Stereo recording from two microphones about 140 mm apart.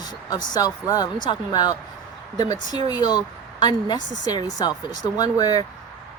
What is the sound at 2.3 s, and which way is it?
Speech, 55° right (ahead or behind).